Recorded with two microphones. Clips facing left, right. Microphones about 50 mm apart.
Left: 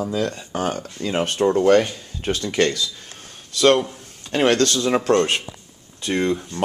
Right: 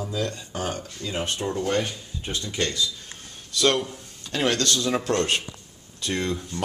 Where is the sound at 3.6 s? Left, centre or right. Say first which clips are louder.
Left 6 dB; left.